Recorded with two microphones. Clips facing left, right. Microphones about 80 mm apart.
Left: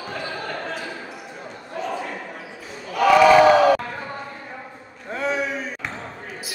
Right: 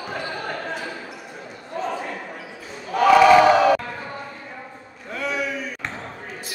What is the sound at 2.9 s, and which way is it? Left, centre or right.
Choir, right.